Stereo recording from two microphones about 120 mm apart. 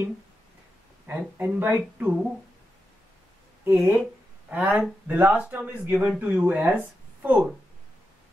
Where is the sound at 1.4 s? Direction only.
15° right (ahead or behind).